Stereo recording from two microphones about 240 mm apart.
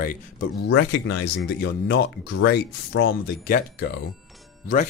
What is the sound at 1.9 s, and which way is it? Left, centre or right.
Speech, left.